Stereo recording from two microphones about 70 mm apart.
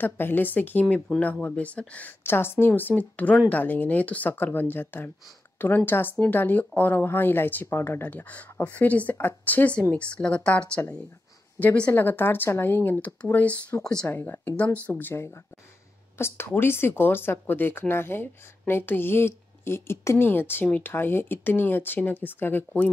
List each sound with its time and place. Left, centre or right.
0.0 s a woman's voice: left
11.9 s speech: left